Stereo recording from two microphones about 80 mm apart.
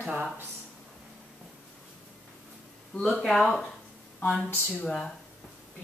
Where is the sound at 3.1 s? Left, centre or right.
Centre.